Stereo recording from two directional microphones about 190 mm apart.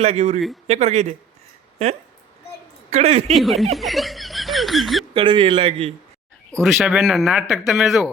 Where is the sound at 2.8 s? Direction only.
35° right (ahead or behind).